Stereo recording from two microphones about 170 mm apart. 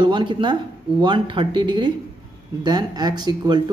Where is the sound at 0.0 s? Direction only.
25° right (ahead or behind).